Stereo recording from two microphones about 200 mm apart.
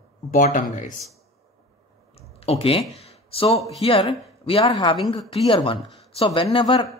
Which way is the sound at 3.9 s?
30° left (ahead or behind).